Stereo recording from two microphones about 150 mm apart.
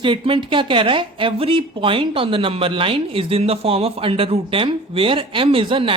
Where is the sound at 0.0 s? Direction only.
35° right (ahead or behind).